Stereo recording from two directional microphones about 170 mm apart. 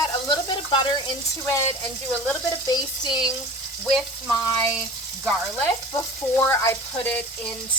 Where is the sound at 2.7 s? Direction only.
25° left (ahead or behind).